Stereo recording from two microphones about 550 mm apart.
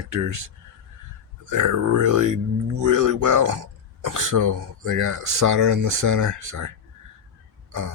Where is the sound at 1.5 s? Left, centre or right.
Right.